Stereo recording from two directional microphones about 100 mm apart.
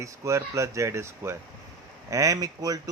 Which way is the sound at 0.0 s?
30° right (ahead or behind).